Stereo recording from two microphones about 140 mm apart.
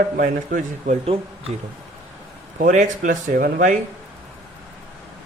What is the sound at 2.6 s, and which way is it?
A man's voice, 65° right (ahead or behind).